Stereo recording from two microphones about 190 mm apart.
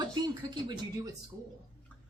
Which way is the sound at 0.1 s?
20° right (ahead or behind).